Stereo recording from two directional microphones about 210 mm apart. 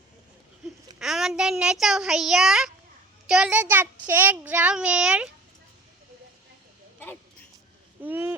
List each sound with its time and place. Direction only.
0.9 s a child's voice: centre (ahead or behind)
8.0 s a child's voice: 10° right (ahead or behind)